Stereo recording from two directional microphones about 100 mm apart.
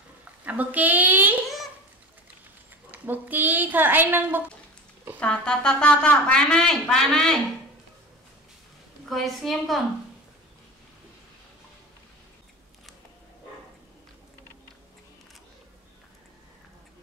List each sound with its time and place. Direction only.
0.5 s a woman's voice: 15° right (ahead or behind)
2.9 s a woman's voice: 20° right (ahead or behind)
5.2 s a woman's voice: 10° left (ahead or behind)
9.1 s a woman's voice: centre (ahead or behind)